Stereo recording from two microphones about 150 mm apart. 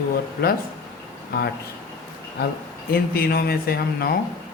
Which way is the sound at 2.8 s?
90° left.